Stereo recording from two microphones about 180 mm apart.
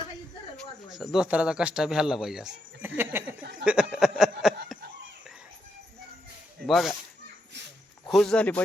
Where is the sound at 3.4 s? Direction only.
70° right (ahead or behind).